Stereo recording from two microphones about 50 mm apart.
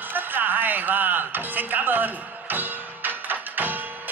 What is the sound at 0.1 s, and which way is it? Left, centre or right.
Music, right.